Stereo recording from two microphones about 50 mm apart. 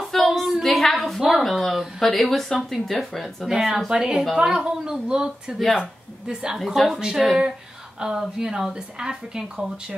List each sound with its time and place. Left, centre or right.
0.0 s a sound: centre
1.4 s speech: centre
3.4 s speech: centre
6.6 s speech: centre